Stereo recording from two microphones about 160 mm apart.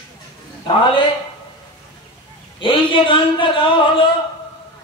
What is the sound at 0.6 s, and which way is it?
Speech, 30° left (ahead or behind).